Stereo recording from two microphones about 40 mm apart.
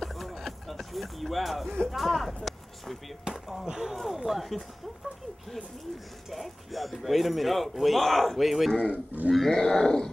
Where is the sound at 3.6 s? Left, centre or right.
Centre.